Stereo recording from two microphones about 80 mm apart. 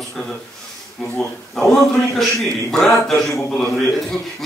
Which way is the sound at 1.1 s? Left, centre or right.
Centre.